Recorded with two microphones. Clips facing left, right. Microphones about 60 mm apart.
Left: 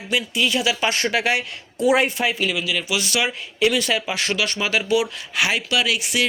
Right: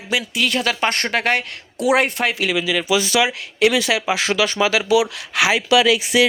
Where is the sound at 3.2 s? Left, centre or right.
Right.